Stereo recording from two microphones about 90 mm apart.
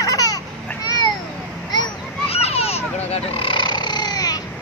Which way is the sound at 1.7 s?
55° left (ahead or behind).